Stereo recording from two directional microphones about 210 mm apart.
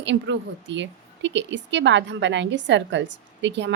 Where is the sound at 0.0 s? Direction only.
60° right (ahead or behind).